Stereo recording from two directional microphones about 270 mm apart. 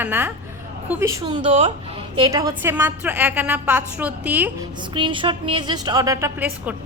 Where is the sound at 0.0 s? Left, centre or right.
Centre.